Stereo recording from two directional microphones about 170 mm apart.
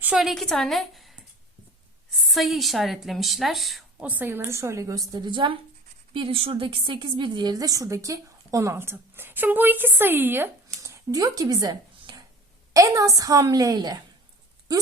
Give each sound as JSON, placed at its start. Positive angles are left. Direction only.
{"t": 0.0, "sound": "a woman's voice", "side_deg": -5}